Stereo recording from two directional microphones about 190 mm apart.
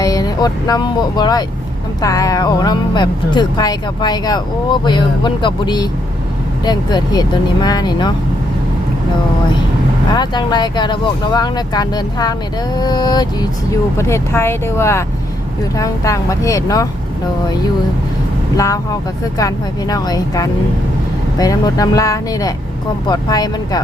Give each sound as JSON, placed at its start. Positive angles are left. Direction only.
{"t": 0.0, "sound": "speech", "side_deg": 20}
{"t": 10.2, "sound": "speech", "side_deg": 20}
{"t": 18.5, "sound": "speech", "side_deg": 15}